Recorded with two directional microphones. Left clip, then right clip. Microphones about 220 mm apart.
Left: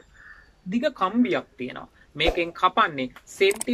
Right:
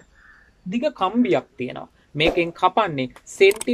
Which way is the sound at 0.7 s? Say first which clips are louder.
Right 2 dB; 10° right (ahead or behind).